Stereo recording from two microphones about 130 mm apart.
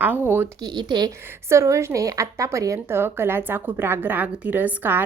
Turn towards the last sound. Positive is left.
turn(degrees=-15)  # may be behind; listen again after turning